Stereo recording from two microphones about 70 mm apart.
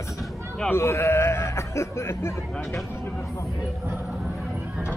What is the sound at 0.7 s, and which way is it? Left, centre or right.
Speech, left.